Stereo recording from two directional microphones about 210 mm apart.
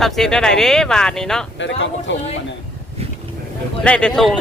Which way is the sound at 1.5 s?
60° left (ahead or behind).